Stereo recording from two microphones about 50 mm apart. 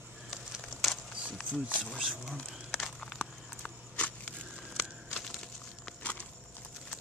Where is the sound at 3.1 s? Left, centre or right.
Left.